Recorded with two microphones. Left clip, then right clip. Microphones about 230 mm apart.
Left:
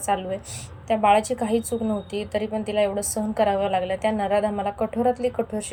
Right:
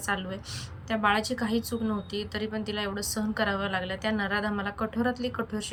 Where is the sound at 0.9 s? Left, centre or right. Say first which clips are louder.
Left 7 dB; right.